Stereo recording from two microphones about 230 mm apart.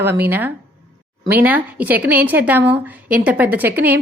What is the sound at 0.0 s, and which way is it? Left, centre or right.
A woman's voice, centre.